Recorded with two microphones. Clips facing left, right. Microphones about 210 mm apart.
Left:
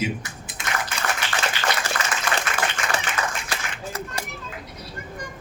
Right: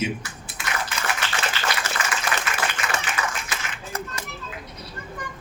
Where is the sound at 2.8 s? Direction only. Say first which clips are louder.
Left 2 dB; 35° left (ahead or behind).